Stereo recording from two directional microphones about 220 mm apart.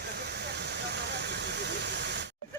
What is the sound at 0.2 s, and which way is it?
Vehicle, 50° right (ahead or behind).